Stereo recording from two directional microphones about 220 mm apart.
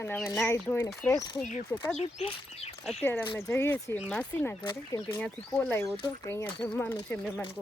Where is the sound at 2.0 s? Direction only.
30° left (ahead or behind).